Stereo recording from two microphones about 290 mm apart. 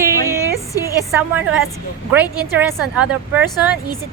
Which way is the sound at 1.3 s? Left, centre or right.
Centre.